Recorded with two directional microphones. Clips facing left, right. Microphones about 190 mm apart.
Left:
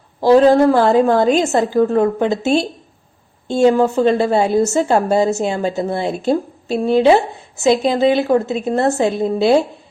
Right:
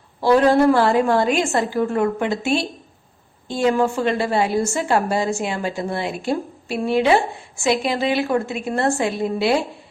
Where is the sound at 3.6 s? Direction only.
25° left (ahead or behind).